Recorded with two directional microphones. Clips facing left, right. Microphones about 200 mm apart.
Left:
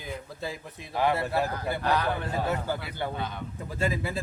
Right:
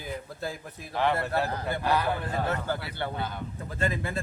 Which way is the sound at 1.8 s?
10° right (ahead or behind).